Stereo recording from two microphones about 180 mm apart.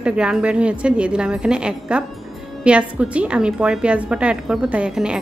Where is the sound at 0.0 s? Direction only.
5° right (ahead or behind).